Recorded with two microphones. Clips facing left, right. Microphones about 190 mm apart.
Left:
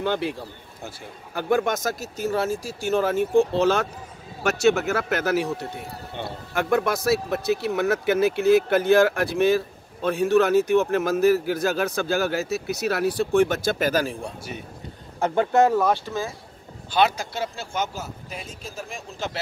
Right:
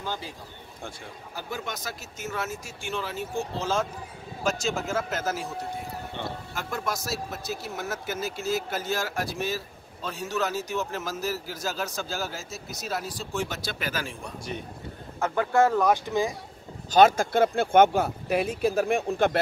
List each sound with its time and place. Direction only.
0.0 s speech: 65° left (ahead or behind)
1.3 s a man's voice: 55° left (ahead or behind); by 14.3 s 40° left (ahead or behind)
15.1 s speech: 30° left (ahead or behind)
15.9 s speech: 15° right (ahead or behind)
16.9 s speech: 45° right (ahead or behind)